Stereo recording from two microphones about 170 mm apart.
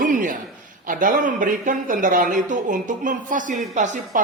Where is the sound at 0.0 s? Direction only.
50° right (ahead or behind).